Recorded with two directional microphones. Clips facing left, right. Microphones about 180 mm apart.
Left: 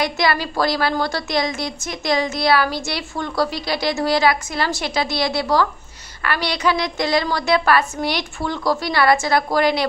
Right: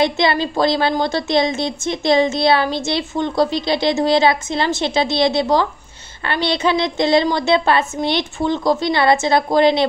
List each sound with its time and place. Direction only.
0.0 s a woman's voice: 25° right (ahead or behind)